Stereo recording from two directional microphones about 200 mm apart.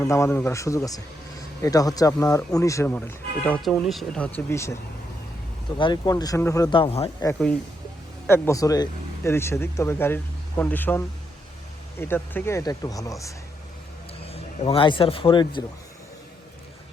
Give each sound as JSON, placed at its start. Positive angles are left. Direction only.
{"t": 0.0, "sound": "speech", "side_deg": 10}
{"t": 8.3, "sound": "speech", "side_deg": 15}
{"t": 14.3, "sound": "speech", "side_deg": 30}